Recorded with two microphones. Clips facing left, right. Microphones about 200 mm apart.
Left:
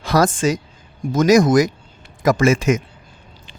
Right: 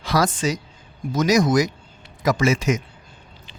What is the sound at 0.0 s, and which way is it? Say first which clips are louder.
A woman's voice: left 4 dB; 50° left (ahead or behind).